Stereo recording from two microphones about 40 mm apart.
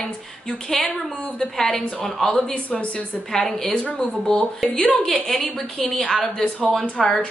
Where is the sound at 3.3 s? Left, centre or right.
Centre.